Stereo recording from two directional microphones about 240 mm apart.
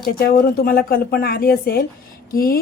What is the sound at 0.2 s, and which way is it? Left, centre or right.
A woman's voice, left.